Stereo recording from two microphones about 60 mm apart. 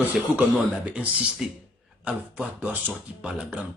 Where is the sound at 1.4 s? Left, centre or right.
Centre.